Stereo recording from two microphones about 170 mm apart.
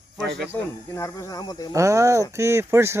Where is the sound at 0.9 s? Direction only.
20° left (ahead or behind).